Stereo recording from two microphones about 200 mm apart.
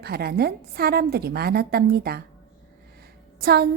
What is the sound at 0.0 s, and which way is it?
A woman's voice, 50° right (ahead or behind).